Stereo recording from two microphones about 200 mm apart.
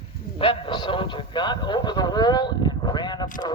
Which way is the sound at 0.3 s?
25° left (ahead or behind).